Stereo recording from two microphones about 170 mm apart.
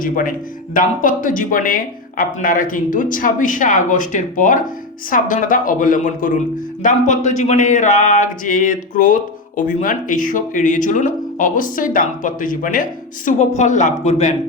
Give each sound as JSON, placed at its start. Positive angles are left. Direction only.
{"t": 0.0, "sound": "speech", "side_deg": 55}